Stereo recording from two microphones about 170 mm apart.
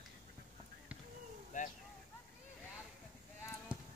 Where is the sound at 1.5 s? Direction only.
50° left (ahead or behind).